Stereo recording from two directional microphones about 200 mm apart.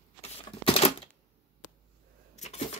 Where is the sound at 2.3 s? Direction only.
35° left (ahead or behind).